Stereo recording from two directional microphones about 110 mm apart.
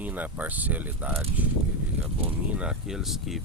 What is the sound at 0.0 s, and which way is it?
Speech, 15° right (ahead or behind).